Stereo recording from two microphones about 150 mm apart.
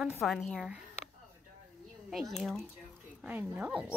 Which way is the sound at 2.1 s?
Centre (ahead or behind).